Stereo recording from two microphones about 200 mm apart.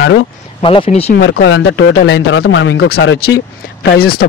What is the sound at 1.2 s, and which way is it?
A man's voice, 65° left (ahead or behind).